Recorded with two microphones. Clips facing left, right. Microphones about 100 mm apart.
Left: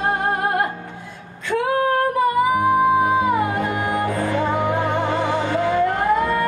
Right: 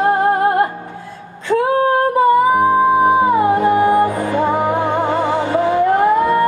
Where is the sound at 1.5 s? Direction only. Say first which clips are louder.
Right 5 dB; 30° right (ahead or behind).